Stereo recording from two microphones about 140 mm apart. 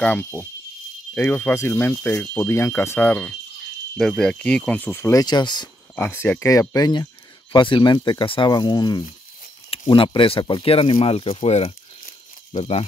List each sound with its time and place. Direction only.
0.0 s speech: 15° left (ahead or behind)
5.2 s speech: 30° left (ahead or behind)
5.9 s speech: 15° left (ahead or behind); by 12.8 s 45° left (ahead or behind)